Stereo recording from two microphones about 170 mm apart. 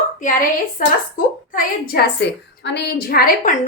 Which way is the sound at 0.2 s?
50° left (ahead or behind).